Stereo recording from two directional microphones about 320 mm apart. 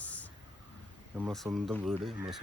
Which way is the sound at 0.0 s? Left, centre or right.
Centre.